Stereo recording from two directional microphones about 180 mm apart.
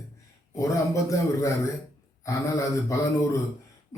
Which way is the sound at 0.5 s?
15° left (ahead or behind).